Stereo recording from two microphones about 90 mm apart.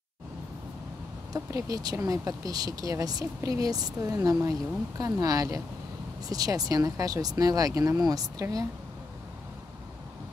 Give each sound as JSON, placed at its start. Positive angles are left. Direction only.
{"t": 1.3, "sound": "speech", "side_deg": -40}